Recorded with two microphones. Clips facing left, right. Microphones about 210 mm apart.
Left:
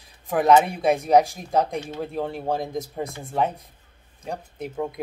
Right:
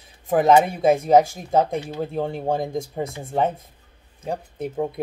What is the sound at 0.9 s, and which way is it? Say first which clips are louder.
Speech: right 2 dB; centre (ahead or behind).